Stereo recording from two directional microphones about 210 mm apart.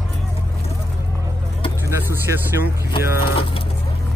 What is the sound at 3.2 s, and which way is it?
Pigeon, 25° left (ahead or behind).